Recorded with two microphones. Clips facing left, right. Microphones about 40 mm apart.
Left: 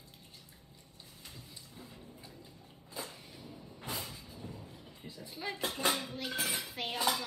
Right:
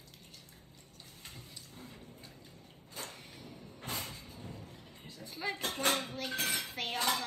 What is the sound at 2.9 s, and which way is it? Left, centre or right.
Vehicle, right.